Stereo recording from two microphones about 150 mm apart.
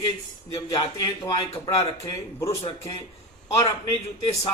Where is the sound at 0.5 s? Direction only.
25° left (ahead or behind).